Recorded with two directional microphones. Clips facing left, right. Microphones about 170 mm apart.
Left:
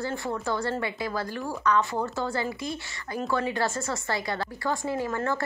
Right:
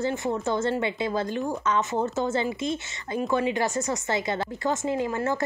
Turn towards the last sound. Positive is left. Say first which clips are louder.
# right 2 dB
turn(degrees=-15)  # may be behind; listen again after turning